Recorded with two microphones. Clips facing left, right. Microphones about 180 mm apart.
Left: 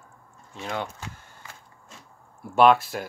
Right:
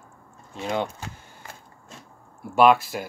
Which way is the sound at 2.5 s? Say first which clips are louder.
Right 1 dB; centre (ahead or behind).